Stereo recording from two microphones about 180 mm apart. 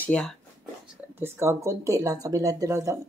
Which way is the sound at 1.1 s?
15° right (ahead or behind).